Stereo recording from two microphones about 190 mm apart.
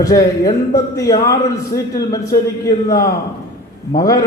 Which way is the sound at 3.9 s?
20° left (ahead or behind).